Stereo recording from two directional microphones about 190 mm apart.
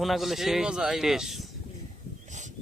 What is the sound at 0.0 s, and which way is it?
Speech, centre (ahead or behind).